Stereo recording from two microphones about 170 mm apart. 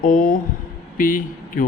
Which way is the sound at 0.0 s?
50° left (ahead or behind).